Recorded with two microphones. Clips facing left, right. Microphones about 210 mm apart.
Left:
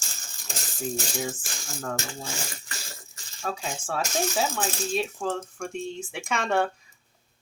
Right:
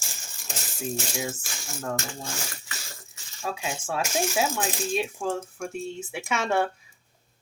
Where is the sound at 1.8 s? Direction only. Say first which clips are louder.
Right 1 dB; 5° right (ahead or behind).